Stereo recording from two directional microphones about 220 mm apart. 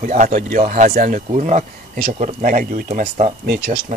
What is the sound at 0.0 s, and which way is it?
Speech, 35° right (ahead or behind).